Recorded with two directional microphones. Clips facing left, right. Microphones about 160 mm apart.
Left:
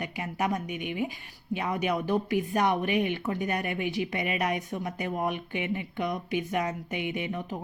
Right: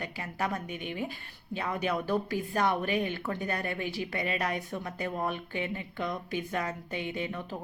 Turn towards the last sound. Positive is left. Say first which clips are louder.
# left 2 dB
turn(degrees=15)  # may be behind; listen again after turning